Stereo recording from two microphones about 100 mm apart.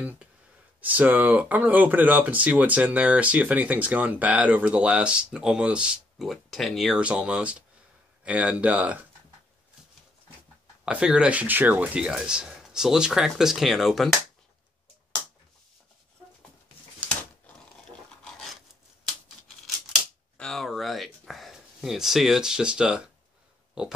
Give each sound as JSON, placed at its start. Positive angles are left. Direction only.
{"t": 0.7, "sound": "speech", "side_deg": -15}
{"t": 7.0, "sound": "speech", "side_deg": -10}
{"t": 10.9, "sound": "speech", "side_deg": -10}
{"t": 18.2, "sound": "filing", "side_deg": 0}
{"t": 19.0, "sound": "scissors", "side_deg": 5}
{"t": 20.3, "sound": "a sound", "side_deg": 5}
{"t": 23.8, "sound": "speech", "side_deg": -10}